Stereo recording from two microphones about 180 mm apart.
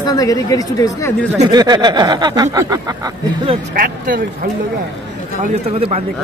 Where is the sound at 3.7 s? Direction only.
50° right (ahead or behind).